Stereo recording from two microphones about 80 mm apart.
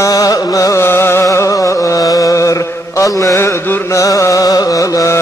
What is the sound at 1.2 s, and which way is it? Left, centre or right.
Music, left.